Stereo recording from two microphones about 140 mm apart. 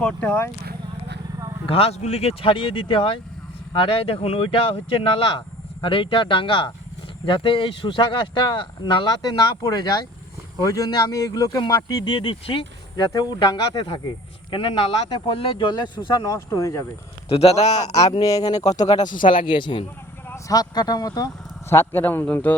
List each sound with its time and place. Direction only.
0.0 s a man's voice: 10° left (ahead or behind)
1.6 s speech: 45° left (ahead or behind); by 16.8 s 25° left (ahead or behind)
17.2 s a man's voice: 45° left (ahead or behind)
18.2 s speech: 25° left (ahead or behind)
19.0 s speech: 75° left (ahead or behind)
19.3 s speech: 35° left (ahead or behind)
21.7 s a man's voice: 15° left (ahead or behind)